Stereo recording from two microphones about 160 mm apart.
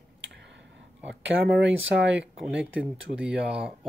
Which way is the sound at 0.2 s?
90° right.